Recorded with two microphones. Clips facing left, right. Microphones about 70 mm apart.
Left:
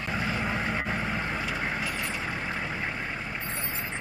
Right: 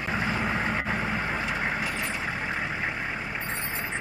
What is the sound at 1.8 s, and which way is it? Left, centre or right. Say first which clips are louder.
Vehicle: right 2 dB; right.